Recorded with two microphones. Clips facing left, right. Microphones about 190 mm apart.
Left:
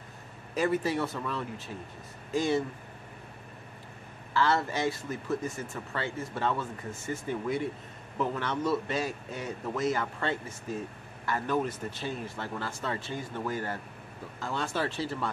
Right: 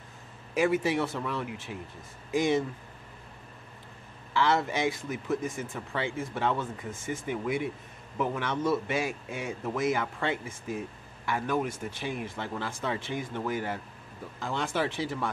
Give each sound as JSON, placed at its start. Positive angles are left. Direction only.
{"t": 0.6, "sound": "a man's voice", "side_deg": -10}
{"t": 4.3, "sound": "a man's voice", "side_deg": -15}